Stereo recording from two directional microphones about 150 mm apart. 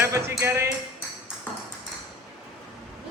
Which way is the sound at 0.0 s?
15° right (ahead or behind).